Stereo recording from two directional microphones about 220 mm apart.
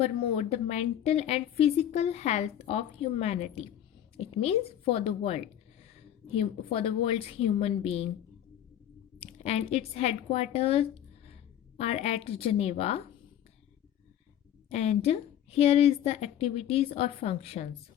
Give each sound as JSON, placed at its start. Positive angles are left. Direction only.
{"t": 0.0, "sound": "a woman's voice", "side_deg": 30}
{"t": 9.1, "sound": "a woman's voice", "side_deg": 25}
{"t": 14.7, "sound": "a woman's voice", "side_deg": 30}